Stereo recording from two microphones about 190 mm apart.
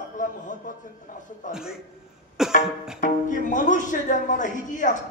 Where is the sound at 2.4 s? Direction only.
Centre (ahead or behind).